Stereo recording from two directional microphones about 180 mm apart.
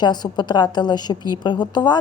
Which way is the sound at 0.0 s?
25° left (ahead or behind).